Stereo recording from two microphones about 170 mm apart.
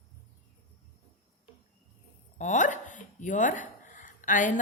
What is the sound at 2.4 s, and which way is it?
Speech, 45° left (ahead or behind).